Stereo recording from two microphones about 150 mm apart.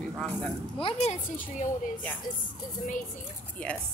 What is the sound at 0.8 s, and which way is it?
Speech, 40° left (ahead or behind).